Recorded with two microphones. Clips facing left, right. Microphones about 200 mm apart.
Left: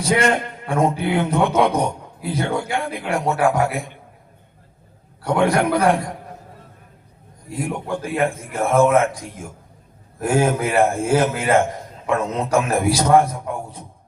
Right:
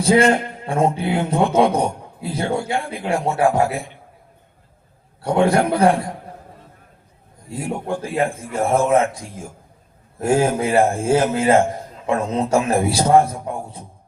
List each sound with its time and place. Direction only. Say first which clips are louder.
0.0 s a man's voice: right 4 dB; 30° right (ahead or behind)
5.2 s a man's voice: right 1 dB; 30° right (ahead or behind)
7.6 s a man's voice: even; 30° right (ahead or behind)